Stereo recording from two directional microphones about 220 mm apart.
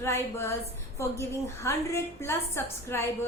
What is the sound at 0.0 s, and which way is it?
A woman's voice, 10° left (ahead or behind).